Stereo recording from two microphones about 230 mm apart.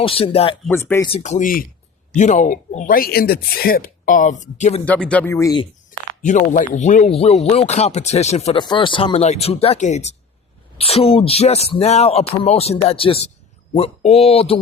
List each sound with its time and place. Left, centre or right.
0.0 s speech: left
0.7 s speech: centre
1.1 s speech: left
4.9 s speech: centre
6.2 s speech: left